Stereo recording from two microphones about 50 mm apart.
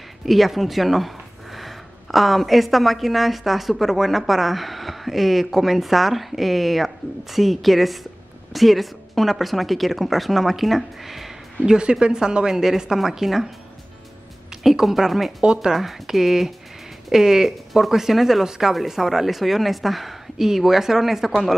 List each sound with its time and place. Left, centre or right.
0.2 s speech: centre
11.7 s a woman's voice: centre
14.6 s speech: centre
15.4 s a woman's voice: centre
15.7 s speech: centre